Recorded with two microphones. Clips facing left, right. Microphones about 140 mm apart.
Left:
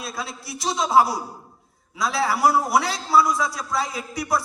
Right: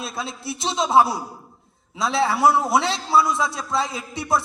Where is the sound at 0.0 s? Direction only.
25° right (ahead or behind).